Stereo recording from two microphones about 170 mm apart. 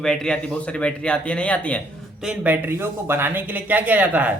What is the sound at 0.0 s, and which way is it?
A man's voice, 5° left (ahead or behind).